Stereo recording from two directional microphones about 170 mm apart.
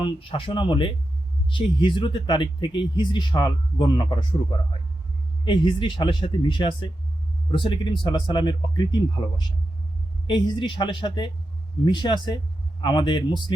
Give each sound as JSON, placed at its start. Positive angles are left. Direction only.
{"t": 0.0, "sound": "speech", "side_deg": 30}
{"t": 5.5, "sound": "speech", "side_deg": 25}